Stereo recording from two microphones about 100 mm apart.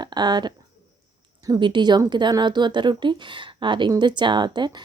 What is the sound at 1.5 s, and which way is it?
A woman's voice, 50° right (ahead or behind).